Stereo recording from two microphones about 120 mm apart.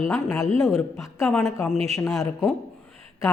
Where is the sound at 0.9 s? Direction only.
5° left (ahead or behind).